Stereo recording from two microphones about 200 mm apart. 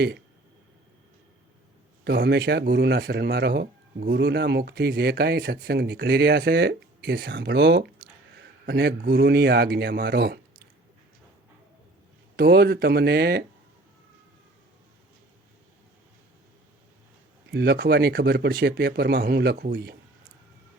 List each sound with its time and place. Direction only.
2.0 s speech: 55° right (ahead or behind)
12.4 s speech: 55° right (ahead or behind)
17.5 s speech: 55° right (ahead or behind)